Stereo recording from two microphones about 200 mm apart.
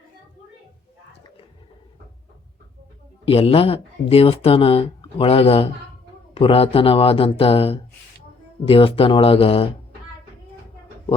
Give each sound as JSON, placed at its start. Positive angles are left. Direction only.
{"t": 3.2, "sound": "speech", "side_deg": 30}